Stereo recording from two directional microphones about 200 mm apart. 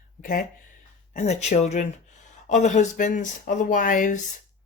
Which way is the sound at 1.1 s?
35° left (ahead or behind).